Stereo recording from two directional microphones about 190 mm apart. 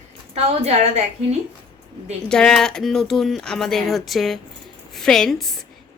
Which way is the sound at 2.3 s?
5° left (ahead or behind).